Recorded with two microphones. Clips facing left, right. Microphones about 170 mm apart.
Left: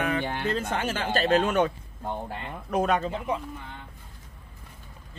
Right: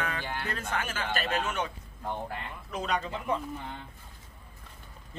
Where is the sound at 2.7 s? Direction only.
55° left (ahead or behind).